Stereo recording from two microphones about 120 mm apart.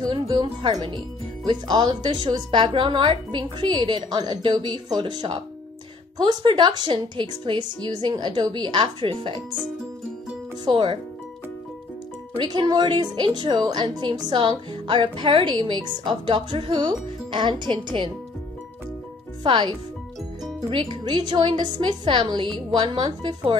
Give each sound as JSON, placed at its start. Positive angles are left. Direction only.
{"t": 0.0, "sound": "speech", "side_deg": -35}
{"t": 10.6, "sound": "speech", "side_deg": -40}
{"t": 12.4, "sound": "speech", "side_deg": -35}
{"t": 19.4, "sound": "speech", "side_deg": -40}
{"t": 20.7, "sound": "speech", "side_deg": -40}